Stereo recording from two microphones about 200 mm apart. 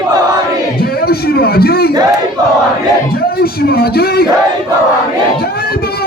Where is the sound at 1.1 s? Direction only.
50° left (ahead or behind).